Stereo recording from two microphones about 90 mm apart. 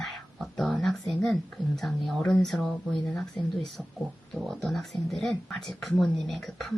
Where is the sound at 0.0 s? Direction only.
5° left (ahead or behind).